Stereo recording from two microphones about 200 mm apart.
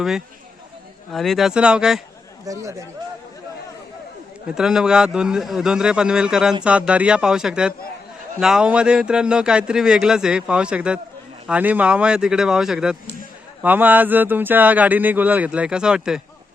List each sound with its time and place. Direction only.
1.1 s speech: centre (ahead or behind)
2.5 s a man's voice: 15° right (ahead or behind)
4.4 s a man's voice: 5° right (ahead or behind)